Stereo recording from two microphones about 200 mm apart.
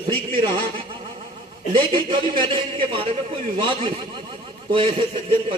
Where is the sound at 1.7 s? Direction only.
25° right (ahead or behind).